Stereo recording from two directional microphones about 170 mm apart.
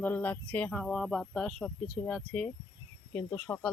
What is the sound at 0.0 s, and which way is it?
Speech, 10° left (ahead or behind).